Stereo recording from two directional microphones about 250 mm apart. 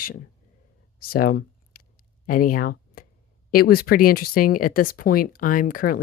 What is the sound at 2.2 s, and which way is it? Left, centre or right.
Speech, left.